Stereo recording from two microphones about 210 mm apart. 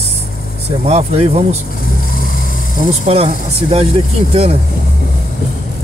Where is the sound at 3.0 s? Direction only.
30° right (ahead or behind).